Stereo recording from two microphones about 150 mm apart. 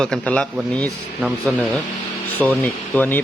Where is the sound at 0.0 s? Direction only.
5° left (ahead or behind).